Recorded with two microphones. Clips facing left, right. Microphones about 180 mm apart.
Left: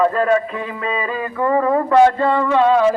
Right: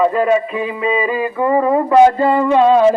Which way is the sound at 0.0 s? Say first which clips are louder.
Right 2 dB; 10° right (ahead or behind).